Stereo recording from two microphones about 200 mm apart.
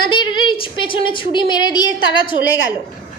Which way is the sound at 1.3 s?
20° left (ahead or behind).